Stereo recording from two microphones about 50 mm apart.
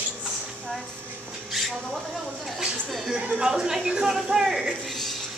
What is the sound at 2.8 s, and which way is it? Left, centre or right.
Speech, centre.